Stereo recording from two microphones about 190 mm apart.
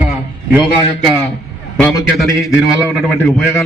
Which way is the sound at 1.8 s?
15° left (ahead or behind).